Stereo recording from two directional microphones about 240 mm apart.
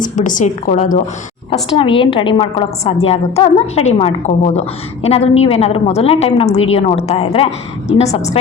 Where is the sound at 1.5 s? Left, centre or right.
Left.